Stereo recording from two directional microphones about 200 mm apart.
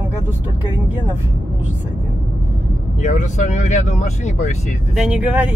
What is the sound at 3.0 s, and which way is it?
Speech, 40° left (ahead or behind).